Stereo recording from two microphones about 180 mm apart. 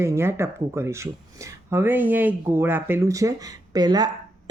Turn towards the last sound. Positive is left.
turn(degrees=-20)  # may be behind; listen again after turning